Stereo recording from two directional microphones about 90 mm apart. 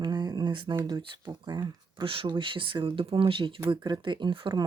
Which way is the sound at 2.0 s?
85° right.